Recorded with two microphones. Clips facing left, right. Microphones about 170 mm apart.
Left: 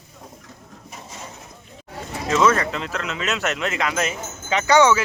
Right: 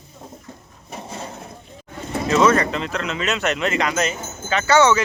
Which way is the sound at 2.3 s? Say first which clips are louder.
Right 2 dB; centre (ahead or behind).